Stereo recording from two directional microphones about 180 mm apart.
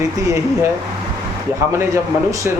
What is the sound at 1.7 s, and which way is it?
Speech, 15° right (ahead or behind).